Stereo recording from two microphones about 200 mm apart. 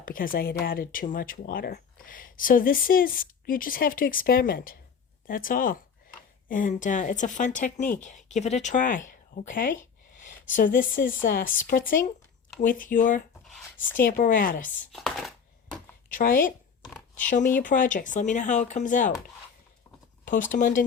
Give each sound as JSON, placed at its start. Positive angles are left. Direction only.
{"t": 0.0, "sound": "a woman's voice", "side_deg": 45}
{"t": 13.5, "sound": "a sound", "side_deg": 10}
{"t": 14.0, "sound": "speech", "side_deg": 40}
{"t": 14.7, "sound": "chopping", "side_deg": 0}
{"t": 16.0, "sound": "a woman's voice", "side_deg": 45}
{"t": 16.8, "sound": "a sound", "side_deg": 5}
{"t": 17.2, "sound": "a woman's voice", "side_deg": 40}
{"t": 20.2, "sound": "a woman's voice", "side_deg": 40}